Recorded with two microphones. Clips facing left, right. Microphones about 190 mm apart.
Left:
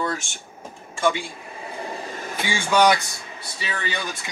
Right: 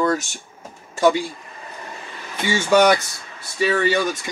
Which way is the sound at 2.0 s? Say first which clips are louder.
Left 5 dB; 45° left (ahead or behind).